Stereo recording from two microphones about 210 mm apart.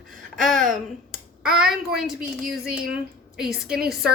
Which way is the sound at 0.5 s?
40° right (ahead or behind).